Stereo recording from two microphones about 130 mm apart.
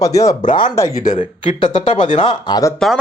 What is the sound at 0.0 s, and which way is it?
Speech, 25° left (ahead or behind).